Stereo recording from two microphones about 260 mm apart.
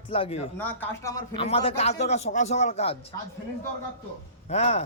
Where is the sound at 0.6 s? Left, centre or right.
Centre; by 3.0 s left.